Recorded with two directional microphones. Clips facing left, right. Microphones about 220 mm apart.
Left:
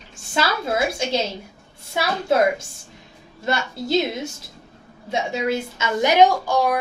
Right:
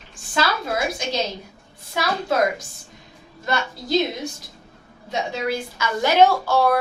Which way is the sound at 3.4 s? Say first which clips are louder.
Left 2 dB; 25° left (ahead or behind).